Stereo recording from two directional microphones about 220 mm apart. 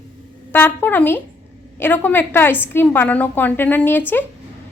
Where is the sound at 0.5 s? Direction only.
10° left (ahead or behind).